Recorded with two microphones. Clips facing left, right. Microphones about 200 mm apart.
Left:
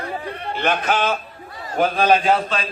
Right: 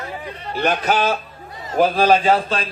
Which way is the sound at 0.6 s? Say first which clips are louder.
Right 2 dB; 40° right (ahead or behind).